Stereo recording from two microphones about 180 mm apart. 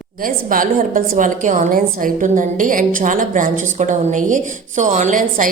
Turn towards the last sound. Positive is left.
turn(degrees=-45)  # may be behind; listen again after turning